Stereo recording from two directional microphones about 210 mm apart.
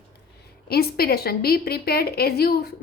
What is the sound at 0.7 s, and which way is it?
A woman's voice, 45° left (ahead or behind).